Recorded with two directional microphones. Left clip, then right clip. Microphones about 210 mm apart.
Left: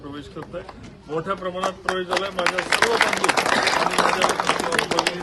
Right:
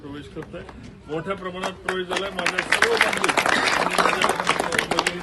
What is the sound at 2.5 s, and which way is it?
Speech, 50° left (ahead or behind).